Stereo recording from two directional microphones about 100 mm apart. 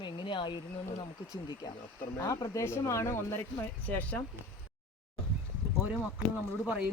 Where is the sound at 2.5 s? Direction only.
30° left (ahead or behind).